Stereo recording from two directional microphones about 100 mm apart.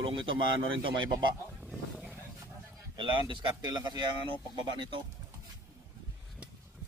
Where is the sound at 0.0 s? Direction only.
55° right (ahead or behind).